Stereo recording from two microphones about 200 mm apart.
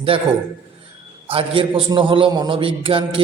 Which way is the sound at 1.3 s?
25° right (ahead or behind).